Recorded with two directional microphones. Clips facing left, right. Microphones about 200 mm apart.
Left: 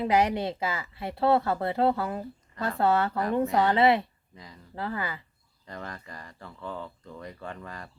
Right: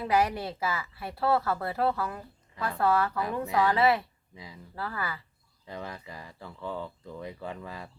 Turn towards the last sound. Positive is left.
turn(degrees=-5)  # may be behind; listen again after turning